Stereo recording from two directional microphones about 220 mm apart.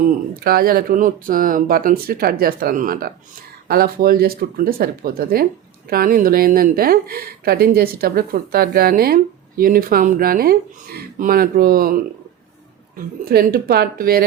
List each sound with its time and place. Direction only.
0.3 s speech: 45° right (ahead or behind)
13.2 s speech: 45° right (ahead or behind)